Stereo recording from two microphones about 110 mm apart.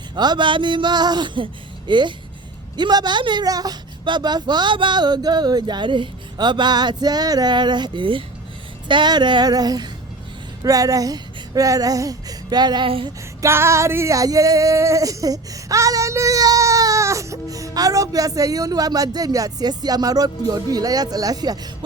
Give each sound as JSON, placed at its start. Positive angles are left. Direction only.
{"t": 0.2, "sound": "speech", "side_deg": -45}
{"t": 2.7, "sound": "female singing", "side_deg": -40}
{"t": 10.6, "sound": "a sound", "side_deg": -30}
{"t": 13.4, "sound": "female singing", "side_deg": -25}